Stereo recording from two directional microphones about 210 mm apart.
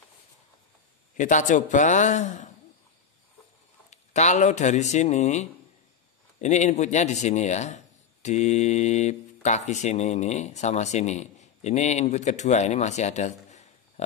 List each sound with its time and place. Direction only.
1.1 s speech: 35° left (ahead or behind)
3.9 s speech: 35° left (ahead or behind)